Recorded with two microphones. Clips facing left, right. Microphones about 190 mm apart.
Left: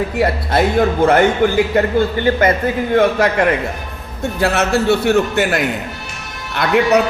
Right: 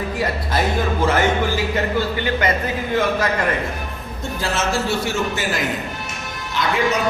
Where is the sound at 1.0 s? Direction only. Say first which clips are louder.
Left 5 dB; 60° left (ahead or behind).